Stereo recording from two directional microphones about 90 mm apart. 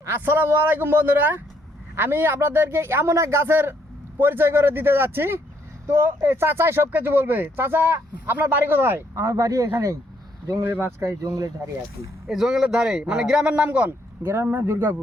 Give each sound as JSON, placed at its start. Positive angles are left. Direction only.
{"t": 0.0, "sound": "speech", "side_deg": -25}
{"t": 12.3, "sound": "speech", "side_deg": -5}